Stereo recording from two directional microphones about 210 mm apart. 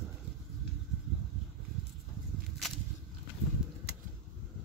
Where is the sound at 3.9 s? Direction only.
50° right (ahead or behind).